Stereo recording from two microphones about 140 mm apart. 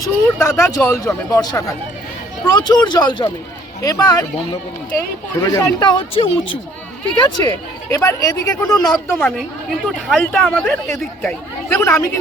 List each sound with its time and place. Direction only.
0.0 s speech: 20° left (ahead or behind)
0.8 s speech: 5° left (ahead or behind)
1.0 s speech: 25° left (ahead or behind)
5.4 s speech: 25° left (ahead or behind); by 6.6 s 40° left (ahead or behind)
7.2 s speech: 30° left (ahead or behind)
10.1 s speech: 5° left (ahead or behind)
11.8 s speech: 20° left (ahead or behind)